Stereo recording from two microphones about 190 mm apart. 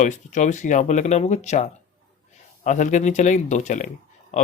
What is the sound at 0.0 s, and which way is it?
Speech, 40° left (ahead or behind).